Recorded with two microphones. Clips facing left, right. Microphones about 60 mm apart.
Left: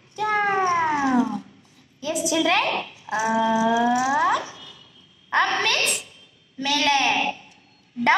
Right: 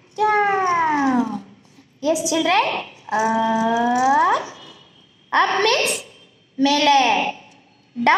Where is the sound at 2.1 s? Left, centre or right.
Centre.